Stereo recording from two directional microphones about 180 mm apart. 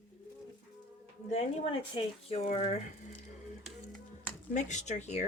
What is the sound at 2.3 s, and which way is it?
Speech, 35° left (ahead or behind).